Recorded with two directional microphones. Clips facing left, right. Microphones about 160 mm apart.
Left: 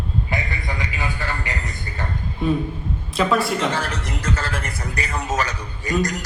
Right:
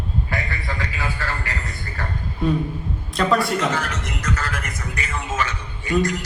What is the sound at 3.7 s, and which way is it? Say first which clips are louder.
A man's voice: even; 30° left (ahead or behind).